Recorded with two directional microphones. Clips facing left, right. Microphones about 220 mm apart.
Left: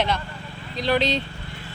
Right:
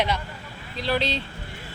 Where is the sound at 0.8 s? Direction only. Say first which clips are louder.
Left 4 dB; 20° left (ahead or behind).